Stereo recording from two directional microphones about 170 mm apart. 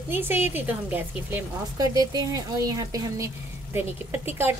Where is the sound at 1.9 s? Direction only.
20° right (ahead or behind).